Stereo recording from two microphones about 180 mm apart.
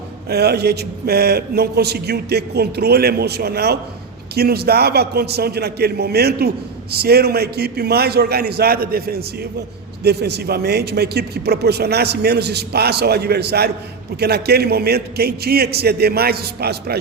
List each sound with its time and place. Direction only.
0.3 s a man's voice: 60° right (ahead or behind)